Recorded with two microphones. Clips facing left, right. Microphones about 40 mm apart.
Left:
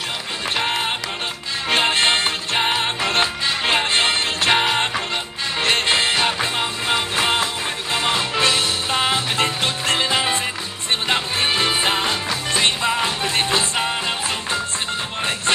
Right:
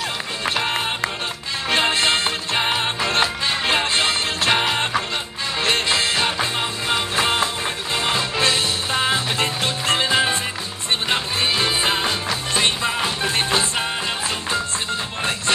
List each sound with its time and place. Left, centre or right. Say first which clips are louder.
0.7 s music: even; left
2.5 s music: left 1 dB; centre
3.6 s music: left 2 dB; left
4.5 s music: left 2 dB; centre
5.6 s music: left 2 dB; left